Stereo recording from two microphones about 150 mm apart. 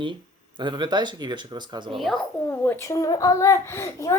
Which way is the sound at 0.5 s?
30° right (ahead or behind).